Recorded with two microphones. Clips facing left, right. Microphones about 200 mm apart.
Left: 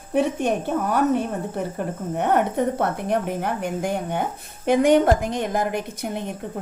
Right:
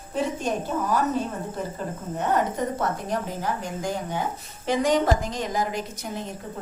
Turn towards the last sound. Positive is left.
turn(degrees=60)  # may be behind; listen again after turning